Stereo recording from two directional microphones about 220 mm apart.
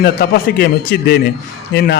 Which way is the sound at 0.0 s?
45° left (ahead or behind).